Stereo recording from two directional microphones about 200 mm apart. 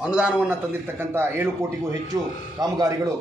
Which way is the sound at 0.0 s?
5° right (ahead or behind).